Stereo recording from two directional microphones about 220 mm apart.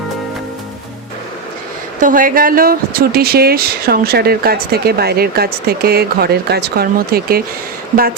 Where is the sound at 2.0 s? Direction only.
40° right (ahead or behind).